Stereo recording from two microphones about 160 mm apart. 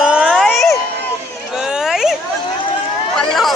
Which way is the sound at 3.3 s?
Centre (ahead or behind).